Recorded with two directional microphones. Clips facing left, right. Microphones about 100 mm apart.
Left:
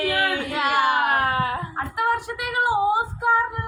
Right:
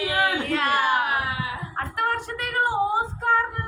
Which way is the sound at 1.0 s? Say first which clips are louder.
Left 5 dB; 50° left (ahead or behind).